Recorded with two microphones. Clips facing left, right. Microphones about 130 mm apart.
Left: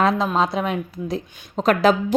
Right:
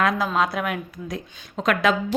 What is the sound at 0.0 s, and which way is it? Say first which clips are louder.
A woman's voice: left 3 dB; 30° left (ahead or behind).